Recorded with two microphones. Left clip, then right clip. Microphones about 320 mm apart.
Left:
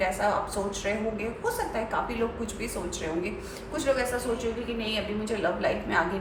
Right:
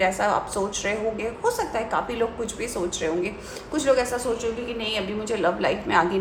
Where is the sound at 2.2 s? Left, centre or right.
Right.